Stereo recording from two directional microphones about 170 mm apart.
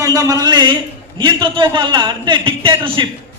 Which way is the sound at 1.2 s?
30° right (ahead or behind).